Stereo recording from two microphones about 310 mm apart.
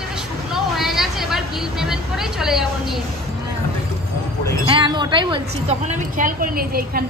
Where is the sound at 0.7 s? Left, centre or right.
Centre.